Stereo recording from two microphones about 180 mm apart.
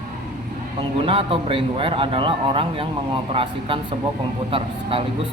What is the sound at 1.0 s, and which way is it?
A man's voice, 30° right (ahead or behind).